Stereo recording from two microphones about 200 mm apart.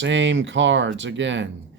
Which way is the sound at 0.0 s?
65° right (ahead or behind).